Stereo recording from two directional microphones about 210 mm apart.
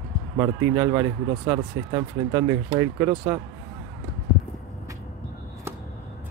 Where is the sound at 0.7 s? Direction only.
10° right (ahead or behind).